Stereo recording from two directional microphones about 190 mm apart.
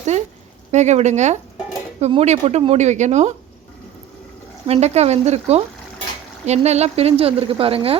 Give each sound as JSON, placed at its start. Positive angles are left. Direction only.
{"t": 0.1, "sound": "a sound", "side_deg": -35}
{"t": 0.7, "sound": "speech", "side_deg": -35}
{"t": 4.6, "sound": "speech", "side_deg": -35}